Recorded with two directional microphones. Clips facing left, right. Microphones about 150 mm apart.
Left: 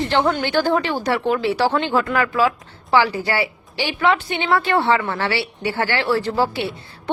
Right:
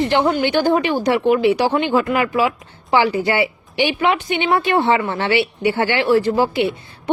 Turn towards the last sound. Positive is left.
turn(degrees=-15)  # may be behind; listen again after turning